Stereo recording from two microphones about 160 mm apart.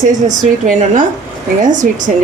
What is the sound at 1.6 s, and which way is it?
Speech, 50° right (ahead or behind).